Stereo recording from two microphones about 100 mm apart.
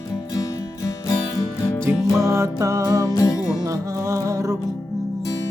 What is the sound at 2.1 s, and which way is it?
Music, 30° right (ahead or behind).